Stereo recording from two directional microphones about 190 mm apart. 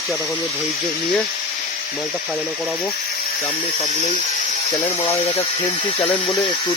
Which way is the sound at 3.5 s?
30° left (ahead or behind).